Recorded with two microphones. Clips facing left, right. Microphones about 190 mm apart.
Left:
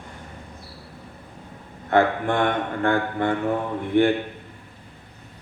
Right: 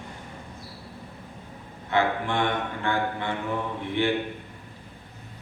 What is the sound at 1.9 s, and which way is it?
Mantra, 50° left (ahead or behind).